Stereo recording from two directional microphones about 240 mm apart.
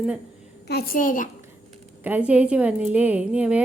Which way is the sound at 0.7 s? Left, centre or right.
Left.